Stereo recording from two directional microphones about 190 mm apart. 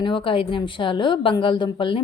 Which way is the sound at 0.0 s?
25° left (ahead or behind).